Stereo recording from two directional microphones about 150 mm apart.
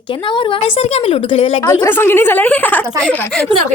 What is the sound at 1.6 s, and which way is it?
A woman's voice, 15° left (ahead or behind).